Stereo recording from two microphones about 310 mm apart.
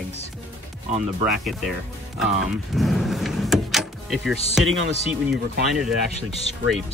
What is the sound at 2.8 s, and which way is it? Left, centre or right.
Power windows, centre.